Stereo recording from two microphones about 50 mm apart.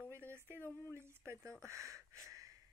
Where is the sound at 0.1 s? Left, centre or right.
Right.